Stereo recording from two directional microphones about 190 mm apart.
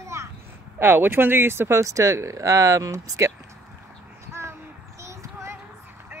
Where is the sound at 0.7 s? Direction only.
10° right (ahead or behind).